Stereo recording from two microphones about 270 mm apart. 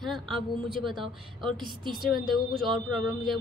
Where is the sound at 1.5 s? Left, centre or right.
Centre.